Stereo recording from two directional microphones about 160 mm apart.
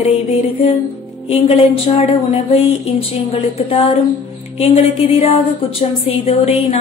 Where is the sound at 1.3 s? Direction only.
40° left (ahead or behind).